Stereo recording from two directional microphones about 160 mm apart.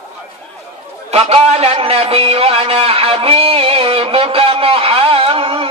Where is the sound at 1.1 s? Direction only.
40° right (ahead or behind).